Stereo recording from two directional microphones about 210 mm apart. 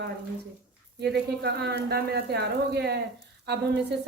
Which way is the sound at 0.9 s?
50° right (ahead or behind).